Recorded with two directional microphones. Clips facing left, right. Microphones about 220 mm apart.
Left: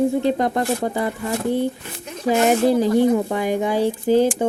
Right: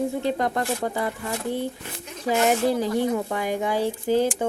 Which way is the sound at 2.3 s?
20° left (ahead or behind).